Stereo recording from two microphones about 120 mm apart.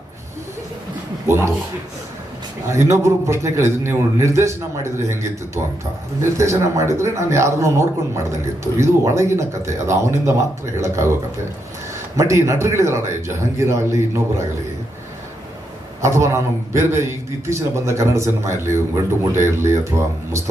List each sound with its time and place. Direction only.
2.6 s speech: 25° right (ahead or behind)
6.3 s speech: 25° right (ahead or behind)
12.1 s speech: 25° right (ahead or behind)
16.0 s speech: 25° right (ahead or behind)